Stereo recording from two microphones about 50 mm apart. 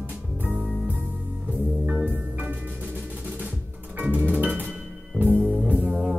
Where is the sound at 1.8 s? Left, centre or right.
Right.